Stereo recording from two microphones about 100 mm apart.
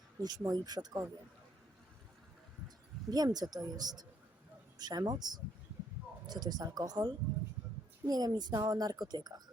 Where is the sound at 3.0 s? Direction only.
40° right (ahead or behind).